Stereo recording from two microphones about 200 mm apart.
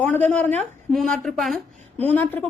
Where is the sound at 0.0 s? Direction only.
5° left (ahead or behind).